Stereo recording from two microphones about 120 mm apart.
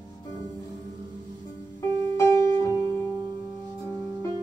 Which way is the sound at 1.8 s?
25° left (ahead or behind).